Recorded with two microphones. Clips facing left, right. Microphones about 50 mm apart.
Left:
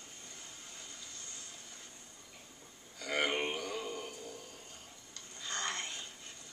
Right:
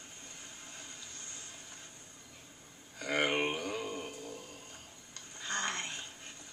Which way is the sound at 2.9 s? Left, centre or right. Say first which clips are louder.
Right 2 dB; right.